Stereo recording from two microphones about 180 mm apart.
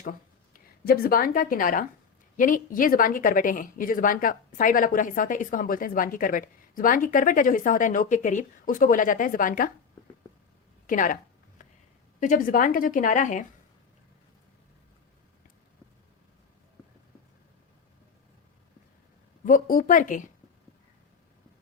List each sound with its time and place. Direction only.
0.0 s speech: 50° left (ahead or behind)
10.8 s a sound: 45° left (ahead or behind)
12.2 s speech: 50° left (ahead or behind)
19.5 s speech: 50° left (ahead or behind)